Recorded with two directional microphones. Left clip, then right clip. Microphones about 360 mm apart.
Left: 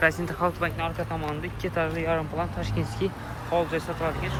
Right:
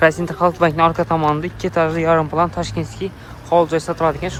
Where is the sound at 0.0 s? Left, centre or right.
Centre.